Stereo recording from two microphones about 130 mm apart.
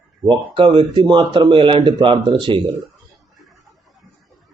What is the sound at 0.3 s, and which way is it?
Speech, 40° right (ahead or behind).